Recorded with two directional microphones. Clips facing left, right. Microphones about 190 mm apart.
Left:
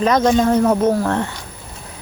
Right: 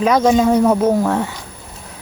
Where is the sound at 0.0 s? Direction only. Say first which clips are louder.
Right 1 dB; 10° right (ahead or behind).